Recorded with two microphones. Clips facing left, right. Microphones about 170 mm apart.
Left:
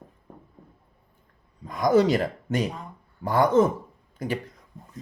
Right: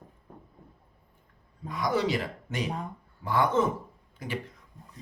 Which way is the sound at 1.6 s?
45° left (ahead or behind).